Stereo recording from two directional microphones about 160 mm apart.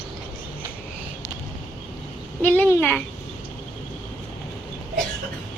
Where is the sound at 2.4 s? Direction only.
10° left (ahead or behind).